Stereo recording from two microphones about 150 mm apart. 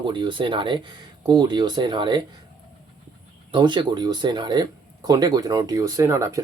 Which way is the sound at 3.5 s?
30° right (ahead or behind).